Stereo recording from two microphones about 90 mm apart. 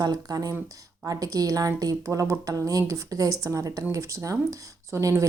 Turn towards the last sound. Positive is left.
turn(degrees=-40)  # may be behind; listen again after turning